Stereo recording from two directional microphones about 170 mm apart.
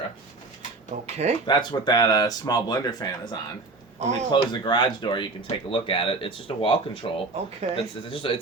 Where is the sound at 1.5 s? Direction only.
25° left (ahead or behind).